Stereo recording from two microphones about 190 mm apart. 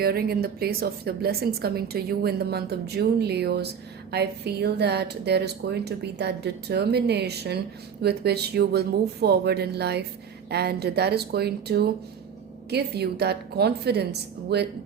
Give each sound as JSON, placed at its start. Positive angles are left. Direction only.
{"t": 0.0, "sound": "a woman's voice", "side_deg": -55}